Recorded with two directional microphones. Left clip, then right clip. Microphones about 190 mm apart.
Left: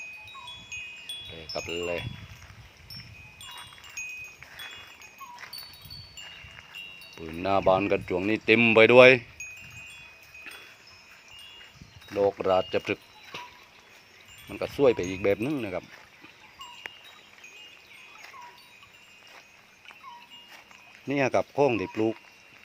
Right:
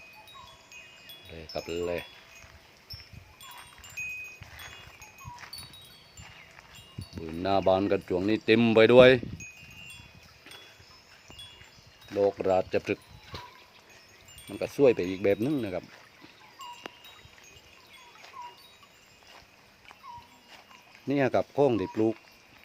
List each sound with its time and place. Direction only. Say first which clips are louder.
1.3 s wind chime: even; 20° right (ahead or behind)
7.2 s a sound: left 1 dB; 10° right (ahead or behind)
7.7 s speech: left 2 dB; 10° right (ahead or behind)
12.1 s a sound: left 1 dB; 10° right (ahead or behind)
14.5 s speech: even; 15° right (ahead or behind)
21.1 s speech: left 1 dB; 15° right (ahead or behind)